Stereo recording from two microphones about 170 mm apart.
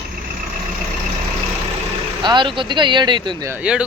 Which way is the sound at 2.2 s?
30° right (ahead or behind).